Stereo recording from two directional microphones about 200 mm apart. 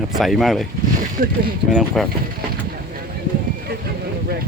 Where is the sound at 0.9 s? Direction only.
45° right (ahead or behind).